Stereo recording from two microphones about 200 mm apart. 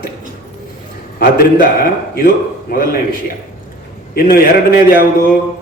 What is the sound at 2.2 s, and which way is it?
Speech, 50° left (ahead or behind).